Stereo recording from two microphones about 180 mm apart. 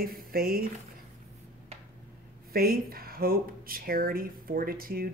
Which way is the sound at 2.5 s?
55° right (ahead or behind).